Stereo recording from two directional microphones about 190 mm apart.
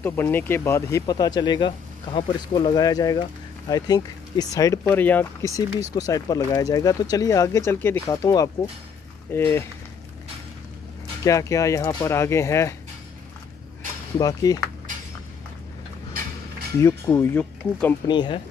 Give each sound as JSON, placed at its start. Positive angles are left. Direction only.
{"t": 0.0, "sound": "speech", "side_deg": 10}
{"t": 11.2, "sound": "speech", "side_deg": 15}
{"t": 14.1, "sound": "speech", "side_deg": 20}
{"t": 16.8, "sound": "speech", "side_deg": 10}
{"t": 18.0, "sound": "speech", "side_deg": 25}